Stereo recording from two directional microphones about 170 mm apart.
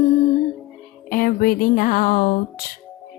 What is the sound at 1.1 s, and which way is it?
Speech, 55° left (ahead or behind).